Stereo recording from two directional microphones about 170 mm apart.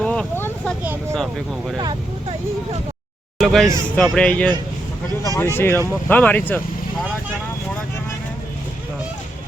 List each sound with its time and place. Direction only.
0.0 s vehicle: 5° left (ahead or behind)
1.1 s speech: centre (ahead or behind)
1.8 s speech: 25° right (ahead or behind)
3.3 s speech: centre (ahead or behind)